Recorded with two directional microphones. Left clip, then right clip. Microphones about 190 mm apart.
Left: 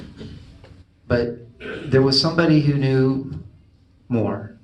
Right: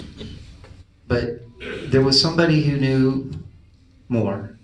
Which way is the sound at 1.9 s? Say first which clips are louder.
Even; 50° left (ahead or behind).